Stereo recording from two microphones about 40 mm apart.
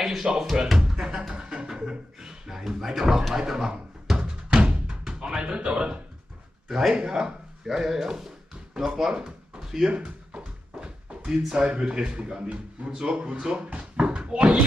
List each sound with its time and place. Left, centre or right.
0.0 s speech: centre
0.7 s music: centre
1.9 s a sound: centre
4.5 s music: centre
5.2 s a man's voice: right
7.0 s speech: centre
9.8 s a sound: right
11.2 s a man's voice: centre